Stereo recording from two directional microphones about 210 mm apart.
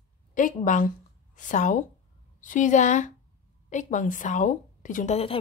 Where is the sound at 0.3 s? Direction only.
40° left (ahead or behind).